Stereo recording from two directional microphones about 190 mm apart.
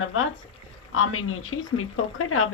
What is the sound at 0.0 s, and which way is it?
Speech, 90° left.